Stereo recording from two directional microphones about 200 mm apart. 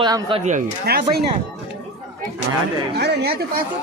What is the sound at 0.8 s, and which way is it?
Speech, 50° right (ahead or behind).